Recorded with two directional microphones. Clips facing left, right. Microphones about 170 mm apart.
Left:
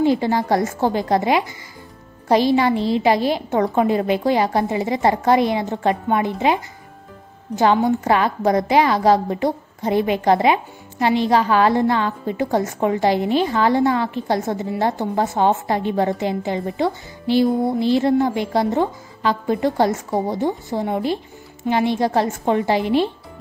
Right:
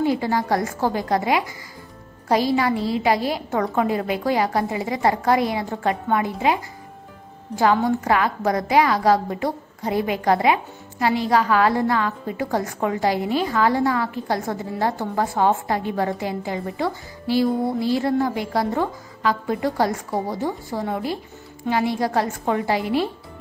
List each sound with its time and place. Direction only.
0.0 s a woman's voice: 25° left (ahead or behind)